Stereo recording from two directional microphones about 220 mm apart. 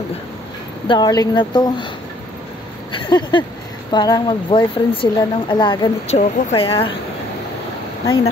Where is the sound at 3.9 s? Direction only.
20° left (ahead or behind).